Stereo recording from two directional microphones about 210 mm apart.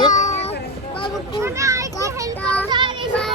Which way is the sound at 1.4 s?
15° right (ahead or behind).